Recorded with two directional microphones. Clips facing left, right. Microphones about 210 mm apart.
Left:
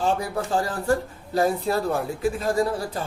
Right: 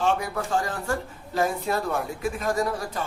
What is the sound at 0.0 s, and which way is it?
A woman's voice, 35° left (ahead or behind).